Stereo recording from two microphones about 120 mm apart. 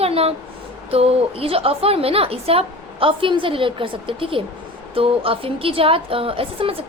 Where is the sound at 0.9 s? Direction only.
55° right (ahead or behind).